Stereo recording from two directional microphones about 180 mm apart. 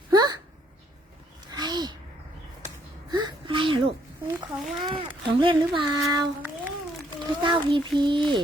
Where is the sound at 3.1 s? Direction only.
25° right (ahead or behind).